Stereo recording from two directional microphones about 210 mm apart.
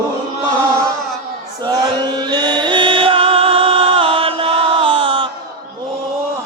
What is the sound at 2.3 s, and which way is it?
Music, 20° right (ahead or behind).